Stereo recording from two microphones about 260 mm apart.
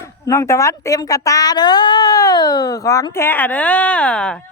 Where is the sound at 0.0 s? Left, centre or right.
Centre.